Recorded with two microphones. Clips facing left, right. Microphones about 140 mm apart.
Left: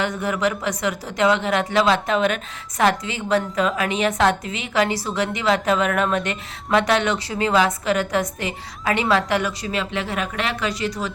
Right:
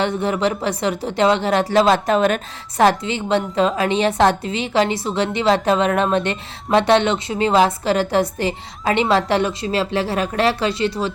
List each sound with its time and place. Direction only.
0.0 s a woman's voice: 30° right (ahead or behind)